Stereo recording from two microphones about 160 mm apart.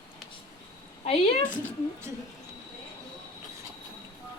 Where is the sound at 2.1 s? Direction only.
20° right (ahead or behind).